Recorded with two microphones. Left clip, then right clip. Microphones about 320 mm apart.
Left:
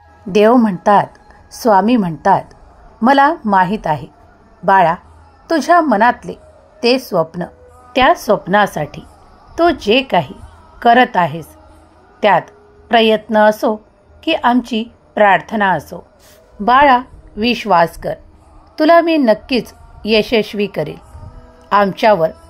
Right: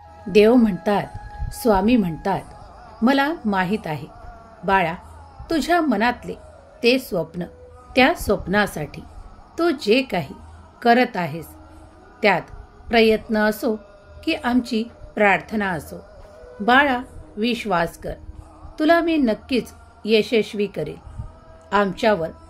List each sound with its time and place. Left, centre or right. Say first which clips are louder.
0.3 s a woman's voice: left 4 dB; centre